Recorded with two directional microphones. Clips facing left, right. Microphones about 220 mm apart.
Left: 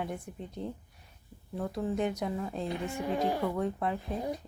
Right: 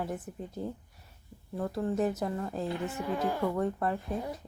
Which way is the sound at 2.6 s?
15° left (ahead or behind).